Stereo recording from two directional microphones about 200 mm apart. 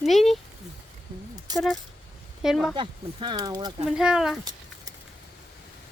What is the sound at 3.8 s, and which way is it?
Speech, 5° right (ahead or behind).